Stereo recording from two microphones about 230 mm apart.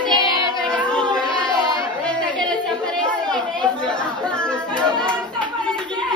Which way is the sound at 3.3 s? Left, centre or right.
Centre.